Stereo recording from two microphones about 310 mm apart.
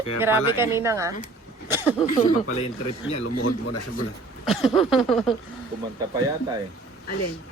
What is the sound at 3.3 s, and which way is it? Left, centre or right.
Speech, left.